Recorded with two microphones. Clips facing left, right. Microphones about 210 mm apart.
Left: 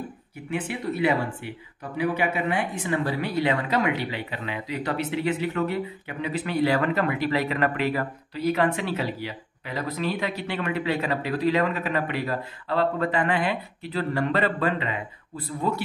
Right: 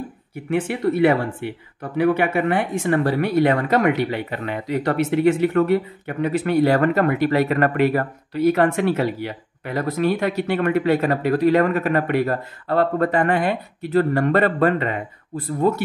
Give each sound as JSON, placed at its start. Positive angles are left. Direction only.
{"t": 0.5, "sound": "speech", "side_deg": -50}
{"t": 0.8, "sound": "speech", "side_deg": -60}